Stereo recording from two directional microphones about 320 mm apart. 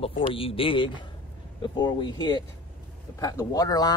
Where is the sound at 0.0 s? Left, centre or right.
Centre.